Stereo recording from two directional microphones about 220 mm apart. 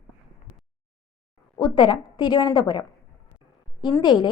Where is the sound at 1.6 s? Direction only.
20° left (ahead or behind).